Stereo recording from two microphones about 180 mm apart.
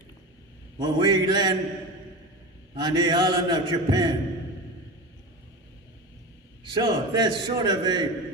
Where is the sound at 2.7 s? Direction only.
25° right (ahead or behind).